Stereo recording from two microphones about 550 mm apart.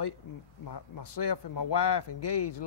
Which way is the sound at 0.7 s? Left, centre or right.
Left.